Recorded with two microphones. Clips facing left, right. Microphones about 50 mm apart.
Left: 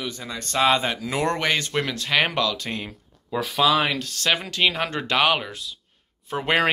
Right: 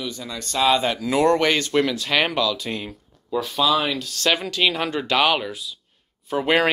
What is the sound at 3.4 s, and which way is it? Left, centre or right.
Speech, left.